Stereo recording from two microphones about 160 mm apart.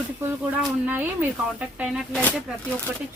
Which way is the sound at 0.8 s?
10° right (ahead or behind).